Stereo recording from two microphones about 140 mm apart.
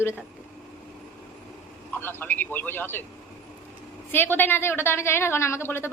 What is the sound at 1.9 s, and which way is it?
Speech, 15° left (ahead or behind).